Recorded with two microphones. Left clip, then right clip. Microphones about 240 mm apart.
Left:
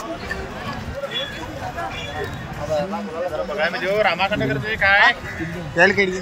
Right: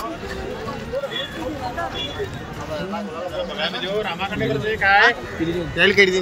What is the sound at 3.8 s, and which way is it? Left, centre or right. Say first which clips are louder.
Speech: left 6 dB; centre.